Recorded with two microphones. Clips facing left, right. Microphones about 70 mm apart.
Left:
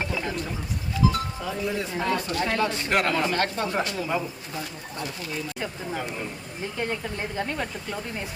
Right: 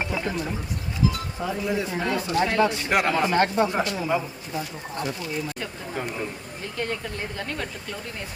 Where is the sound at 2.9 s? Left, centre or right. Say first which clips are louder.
Left 1 dB; centre.